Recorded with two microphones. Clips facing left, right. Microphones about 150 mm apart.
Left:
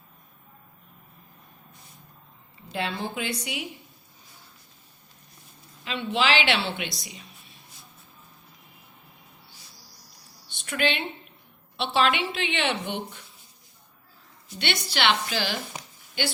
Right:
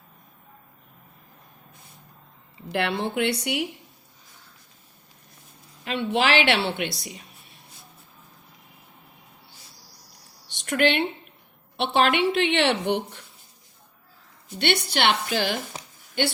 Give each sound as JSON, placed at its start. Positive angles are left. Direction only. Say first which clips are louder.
{"t": 2.7, "sound": "a woman's voice", "louder": "right 5 dB", "side_deg": -75}
{"t": 5.8, "sound": "a woman's voice", "louder": "right 3 dB", "side_deg": -55}
{"t": 10.4, "sound": "a sound", "louder": "right 5 dB", "side_deg": -65}
{"t": 11.9, "sound": "a woman's voice", "louder": "right 4 dB", "side_deg": -55}
{"t": 14.6, "sound": "a woman's voice", "louder": "right 4 dB", "side_deg": -60}